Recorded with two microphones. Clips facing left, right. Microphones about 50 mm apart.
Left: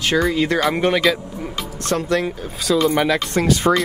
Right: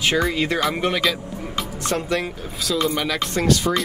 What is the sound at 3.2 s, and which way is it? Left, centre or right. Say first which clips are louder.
Speech: left 2 dB; centre.